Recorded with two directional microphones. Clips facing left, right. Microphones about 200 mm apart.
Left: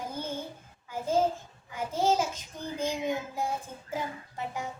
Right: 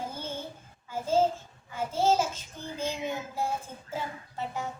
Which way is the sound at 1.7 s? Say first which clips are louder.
Right 1 dB; 15° left (ahead or behind).